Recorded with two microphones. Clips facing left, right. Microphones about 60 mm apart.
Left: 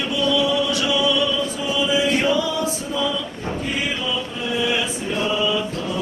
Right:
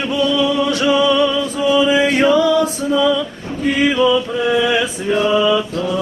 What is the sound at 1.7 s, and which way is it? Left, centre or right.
Chant, right.